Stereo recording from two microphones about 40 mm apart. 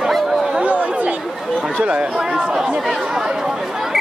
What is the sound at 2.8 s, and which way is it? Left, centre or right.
Speech, centre.